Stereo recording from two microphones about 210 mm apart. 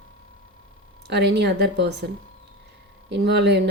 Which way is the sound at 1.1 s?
55° right (ahead or behind).